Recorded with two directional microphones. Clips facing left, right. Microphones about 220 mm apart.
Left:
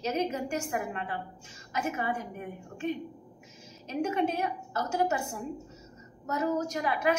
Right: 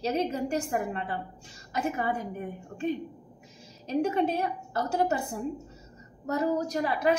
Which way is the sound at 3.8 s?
35° right (ahead or behind).